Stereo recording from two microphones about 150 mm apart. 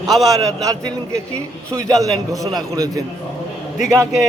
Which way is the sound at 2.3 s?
20° right (ahead or behind).